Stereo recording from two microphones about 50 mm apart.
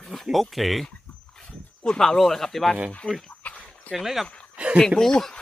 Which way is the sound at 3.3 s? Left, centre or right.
Left.